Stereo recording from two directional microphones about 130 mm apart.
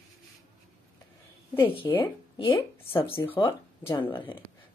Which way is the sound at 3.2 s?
30° left (ahead or behind).